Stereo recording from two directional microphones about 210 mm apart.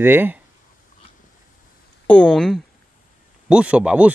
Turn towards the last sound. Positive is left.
turn(degrees=-5)  # may be behind; listen again after turning